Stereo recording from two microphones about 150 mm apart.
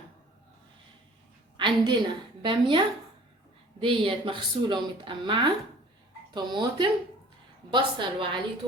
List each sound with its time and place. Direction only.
1.5 s a woman's voice: 30° right (ahead or behind)